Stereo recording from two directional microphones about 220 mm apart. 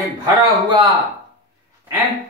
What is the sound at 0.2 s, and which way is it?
Speech, 20° right (ahead or behind).